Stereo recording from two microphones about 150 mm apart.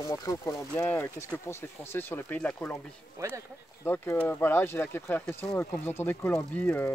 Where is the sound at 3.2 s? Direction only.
20° right (ahead or behind).